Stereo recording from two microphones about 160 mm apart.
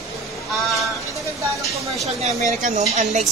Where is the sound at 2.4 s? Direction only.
55° right (ahead or behind).